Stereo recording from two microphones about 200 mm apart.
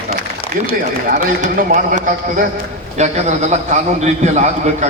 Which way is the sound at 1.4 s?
40° right (ahead or behind).